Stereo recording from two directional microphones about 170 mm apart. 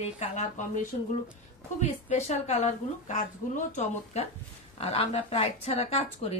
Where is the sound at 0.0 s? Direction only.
40° left (ahead or behind).